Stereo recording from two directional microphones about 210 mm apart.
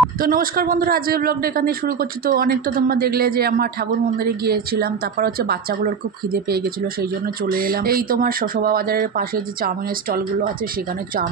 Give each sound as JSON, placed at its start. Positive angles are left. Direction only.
{"t": 0.2, "sound": "a man's voice", "side_deg": -40}
{"t": 7.4, "sound": "a man's voice", "side_deg": -45}